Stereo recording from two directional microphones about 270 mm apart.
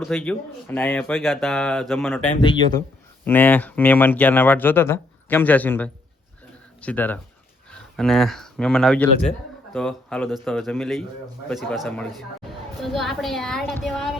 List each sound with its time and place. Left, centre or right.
0.0 s speech: centre
2.4 s speech: centre